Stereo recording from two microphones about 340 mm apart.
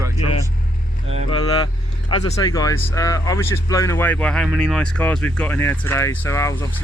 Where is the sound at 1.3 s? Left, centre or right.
Centre.